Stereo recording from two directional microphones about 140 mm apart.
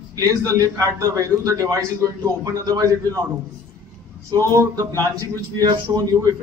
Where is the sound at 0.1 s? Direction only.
25° right (ahead or behind).